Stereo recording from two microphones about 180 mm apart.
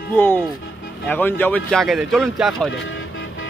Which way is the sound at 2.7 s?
90° left.